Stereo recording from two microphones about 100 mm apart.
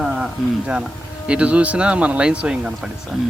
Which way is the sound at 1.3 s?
15° right (ahead or behind).